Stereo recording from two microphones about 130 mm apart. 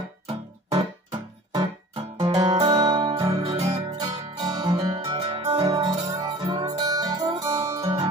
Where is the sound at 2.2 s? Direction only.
30° right (ahead or behind).